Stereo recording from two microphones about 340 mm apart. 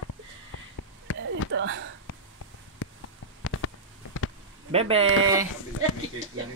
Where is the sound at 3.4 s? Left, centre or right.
Left.